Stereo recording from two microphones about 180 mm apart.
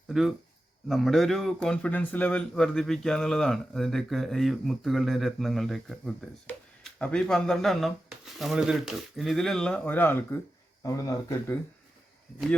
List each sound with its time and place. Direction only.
0.1 s speech: centre (ahead or behind); by 11.5 s 20° left (ahead or behind)